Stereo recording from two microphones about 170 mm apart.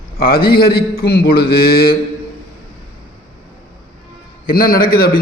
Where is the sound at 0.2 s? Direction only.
60° left (ahead or behind).